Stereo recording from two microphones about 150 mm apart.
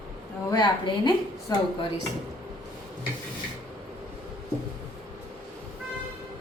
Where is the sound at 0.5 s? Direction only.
30° left (ahead or behind).